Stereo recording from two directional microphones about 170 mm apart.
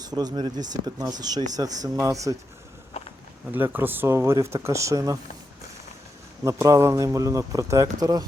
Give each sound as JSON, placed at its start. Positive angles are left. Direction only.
{"t": 0.1, "sound": "speech", "side_deg": -25}
{"t": 3.5, "sound": "speech", "side_deg": -10}
{"t": 6.4, "sound": "speech", "side_deg": -15}